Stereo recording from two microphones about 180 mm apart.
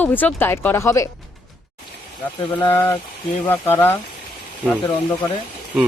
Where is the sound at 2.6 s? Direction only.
15° left (ahead or behind).